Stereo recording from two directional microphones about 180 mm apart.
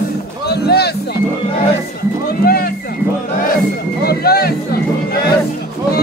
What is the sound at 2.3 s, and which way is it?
Speech, 55° left (ahead or behind).